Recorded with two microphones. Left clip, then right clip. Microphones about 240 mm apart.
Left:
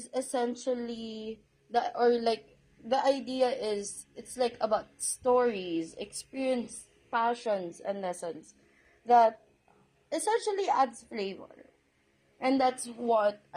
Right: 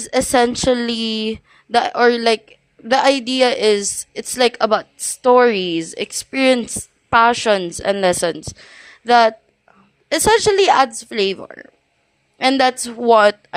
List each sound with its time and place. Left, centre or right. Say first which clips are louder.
0.1 s a woman's voice: right 16 dB; right